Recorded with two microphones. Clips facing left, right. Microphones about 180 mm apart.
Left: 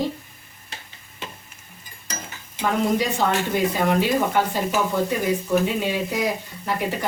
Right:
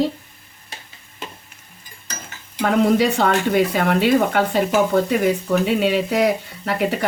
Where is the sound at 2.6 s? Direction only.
70° right (ahead or behind).